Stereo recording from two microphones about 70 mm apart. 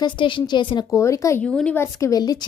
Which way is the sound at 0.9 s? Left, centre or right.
Left.